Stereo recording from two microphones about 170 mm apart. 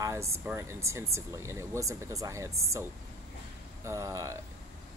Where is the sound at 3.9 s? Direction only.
20° right (ahead or behind).